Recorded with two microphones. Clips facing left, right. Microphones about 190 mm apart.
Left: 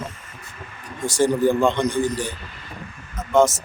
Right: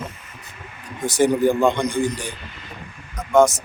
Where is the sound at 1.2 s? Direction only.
15° right (ahead or behind).